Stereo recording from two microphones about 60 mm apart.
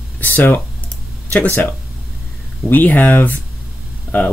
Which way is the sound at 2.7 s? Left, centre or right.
Left.